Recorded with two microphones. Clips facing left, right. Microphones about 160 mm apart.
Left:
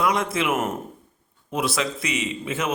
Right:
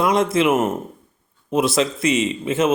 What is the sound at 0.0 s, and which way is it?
A man's voice, 25° right (ahead or behind).